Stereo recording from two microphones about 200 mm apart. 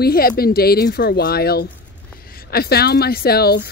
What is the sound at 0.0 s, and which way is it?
Speech, 50° left (ahead or behind).